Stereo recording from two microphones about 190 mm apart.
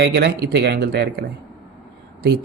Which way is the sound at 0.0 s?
60° right (ahead or behind).